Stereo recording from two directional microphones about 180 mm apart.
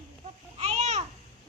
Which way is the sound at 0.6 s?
40° right (ahead or behind).